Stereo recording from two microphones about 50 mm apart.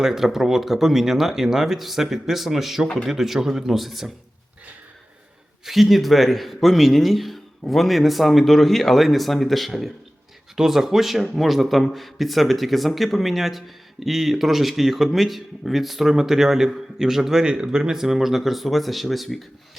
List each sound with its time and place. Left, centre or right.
0.0 s a man's voice: centre
2.8 s speech: centre
3.1 s a man's voice: centre
5.6 s a man's voice: centre